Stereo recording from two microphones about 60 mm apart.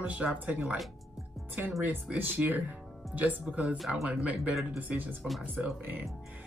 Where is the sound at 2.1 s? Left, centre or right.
Right.